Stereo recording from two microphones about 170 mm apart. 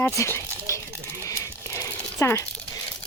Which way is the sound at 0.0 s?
15° left (ahead or behind).